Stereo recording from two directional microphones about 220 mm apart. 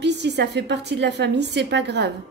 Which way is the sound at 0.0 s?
50° right (ahead or behind).